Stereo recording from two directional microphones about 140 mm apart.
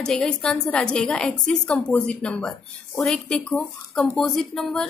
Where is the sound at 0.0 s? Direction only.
5° left (ahead or behind).